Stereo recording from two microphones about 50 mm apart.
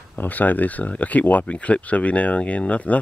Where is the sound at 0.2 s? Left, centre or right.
Left.